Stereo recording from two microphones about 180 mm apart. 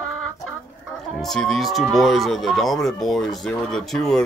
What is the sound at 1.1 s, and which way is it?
Speech, centre (ahead or behind).